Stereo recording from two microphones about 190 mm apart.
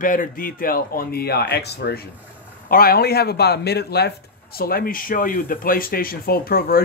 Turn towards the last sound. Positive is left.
turn(degrees=50)  # may be behind; listen again after turning